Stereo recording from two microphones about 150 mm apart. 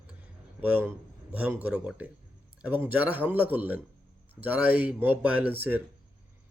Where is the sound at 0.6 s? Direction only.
15° right (ahead or behind).